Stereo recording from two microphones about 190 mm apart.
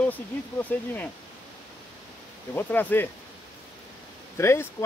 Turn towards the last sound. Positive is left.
turn(degrees=15)  # may be behind; listen again after turning